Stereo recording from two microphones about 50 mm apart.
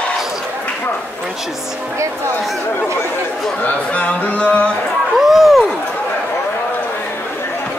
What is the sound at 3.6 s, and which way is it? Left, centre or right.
Speech, left.